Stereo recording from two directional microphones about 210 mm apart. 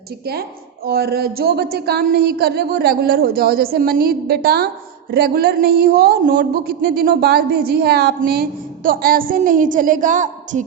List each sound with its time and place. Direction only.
0.9 s a woman's voice: 45° right (ahead or behind)